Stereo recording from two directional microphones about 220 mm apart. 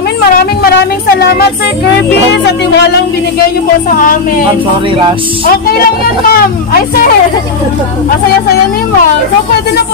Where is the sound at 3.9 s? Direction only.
40° left (ahead or behind).